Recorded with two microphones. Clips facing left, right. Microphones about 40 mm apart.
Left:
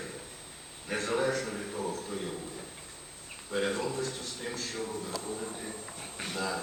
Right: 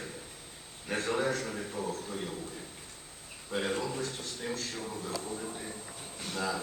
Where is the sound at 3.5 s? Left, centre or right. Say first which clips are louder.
Left 2 dB; centre.